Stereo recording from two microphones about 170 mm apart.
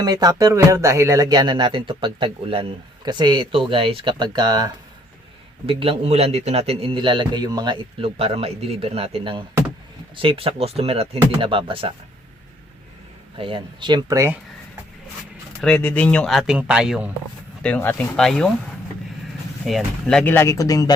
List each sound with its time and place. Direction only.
0.0 s a man's voice: 25° right (ahead or behind)
13.4 s speech: 30° right (ahead or behind)
15.6 s speech: 10° left (ahead or behind)
17.6 s speech: 10° left (ahead or behind)
19.6 s speech: centre (ahead or behind); by 20.9 s 20° left (ahead or behind)